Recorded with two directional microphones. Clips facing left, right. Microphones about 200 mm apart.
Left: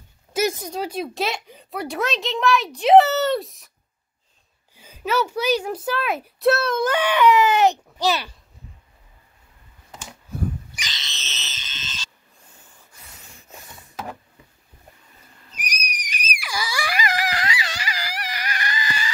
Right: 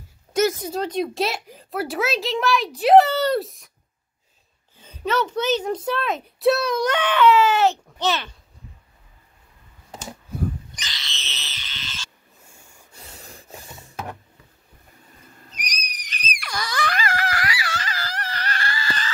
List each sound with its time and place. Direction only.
0.6 s a woman's voice: 5° left (ahead or behind)
4.7 s a child's voice: 5° left (ahead or behind)
10.9 s wild animals: 20° left (ahead or behind)
12.4 s rub: 10° right (ahead or behind)
13.0 s a sound: 30° right (ahead or behind)
15.6 s screaming: 10° left (ahead or behind)